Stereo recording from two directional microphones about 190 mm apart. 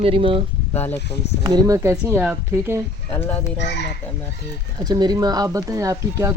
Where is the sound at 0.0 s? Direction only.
30° right (ahead or behind).